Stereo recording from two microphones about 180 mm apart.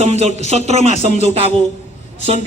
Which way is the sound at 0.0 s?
40° right (ahead or behind).